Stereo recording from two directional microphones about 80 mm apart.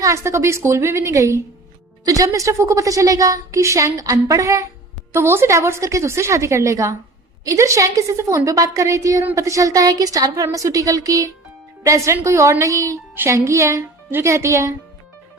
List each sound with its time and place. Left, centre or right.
0.0 s a woman's voice: right
5.1 s a woman's voice: right